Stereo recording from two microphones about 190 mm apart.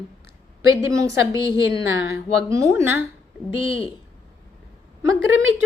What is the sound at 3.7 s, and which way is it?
Speech, 30° left (ahead or behind).